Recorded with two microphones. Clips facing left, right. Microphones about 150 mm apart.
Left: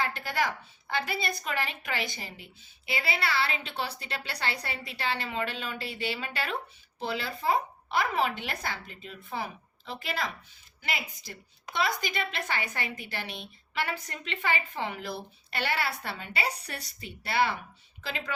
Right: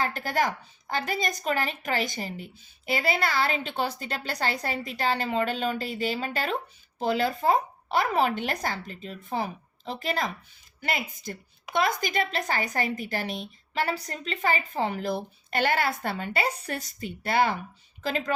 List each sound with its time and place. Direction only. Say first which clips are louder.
0.0 s a woman's voice: right 4 dB; 45° right (ahead or behind)